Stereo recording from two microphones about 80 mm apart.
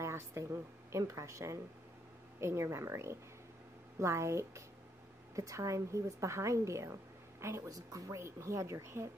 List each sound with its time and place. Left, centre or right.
0.0 s a woman's voice: right